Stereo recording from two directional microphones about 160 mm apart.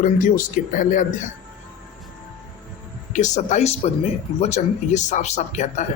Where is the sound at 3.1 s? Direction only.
50° left (ahead or behind).